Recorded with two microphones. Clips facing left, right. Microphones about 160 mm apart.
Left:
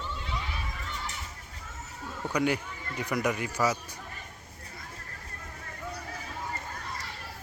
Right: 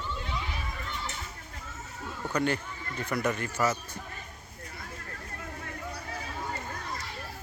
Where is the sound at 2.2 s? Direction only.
10° left (ahead or behind).